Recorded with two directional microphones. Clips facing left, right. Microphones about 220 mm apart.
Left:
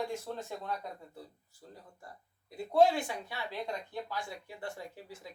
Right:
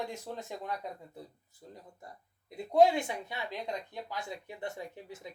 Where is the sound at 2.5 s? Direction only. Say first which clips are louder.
Right 2 dB; 20° right (ahead or behind).